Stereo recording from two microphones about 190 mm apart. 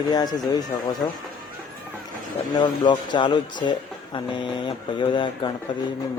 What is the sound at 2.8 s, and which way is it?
Speech, 25° left (ahead or behind).